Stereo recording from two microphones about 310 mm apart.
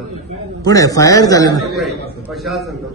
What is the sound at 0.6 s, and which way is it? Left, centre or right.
A man's voice, centre.